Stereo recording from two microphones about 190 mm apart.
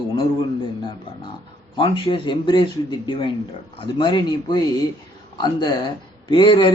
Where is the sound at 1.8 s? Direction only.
25° left (ahead or behind).